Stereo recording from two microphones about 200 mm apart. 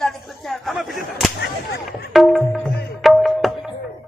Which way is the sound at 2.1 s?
Centre (ahead or behind).